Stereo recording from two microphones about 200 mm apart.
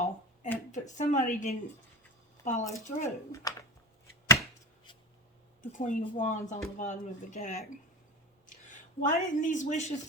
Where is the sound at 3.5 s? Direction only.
15° left (ahead or behind).